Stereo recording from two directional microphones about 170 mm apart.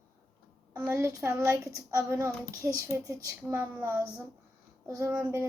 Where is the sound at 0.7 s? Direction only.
15° right (ahead or behind).